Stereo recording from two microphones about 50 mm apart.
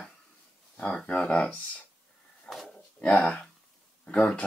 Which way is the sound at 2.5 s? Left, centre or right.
Left.